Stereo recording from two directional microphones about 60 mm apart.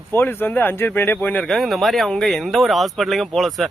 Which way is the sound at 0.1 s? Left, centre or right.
Left.